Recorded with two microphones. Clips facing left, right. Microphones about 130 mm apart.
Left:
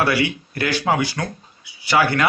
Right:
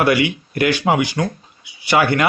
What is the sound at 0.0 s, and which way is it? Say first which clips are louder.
Speech: right 3 dB; 20° right (ahead or behind).